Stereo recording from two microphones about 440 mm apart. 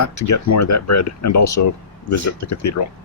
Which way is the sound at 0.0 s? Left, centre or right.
Left.